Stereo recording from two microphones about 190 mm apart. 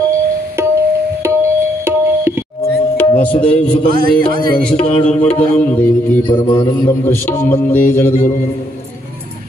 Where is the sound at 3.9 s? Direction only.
50° right (ahead or behind).